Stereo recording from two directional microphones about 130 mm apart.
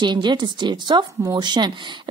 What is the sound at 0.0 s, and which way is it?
A woman's voice, 35° right (ahead or behind).